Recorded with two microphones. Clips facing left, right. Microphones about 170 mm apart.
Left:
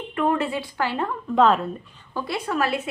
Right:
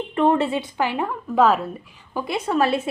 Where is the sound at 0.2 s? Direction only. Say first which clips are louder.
Right 4 dB; 30° right (ahead or behind); by 1.6 s 5° right (ahead or behind).